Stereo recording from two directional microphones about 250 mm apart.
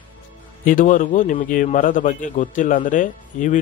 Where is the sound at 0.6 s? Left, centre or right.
Left.